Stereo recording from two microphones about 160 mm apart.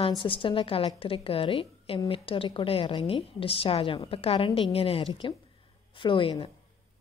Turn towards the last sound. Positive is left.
turn(degrees=35)  # may be behind; listen again after turning